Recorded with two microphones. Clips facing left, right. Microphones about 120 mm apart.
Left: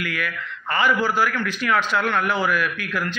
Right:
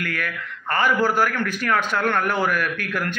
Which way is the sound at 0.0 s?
50° right (ahead or behind).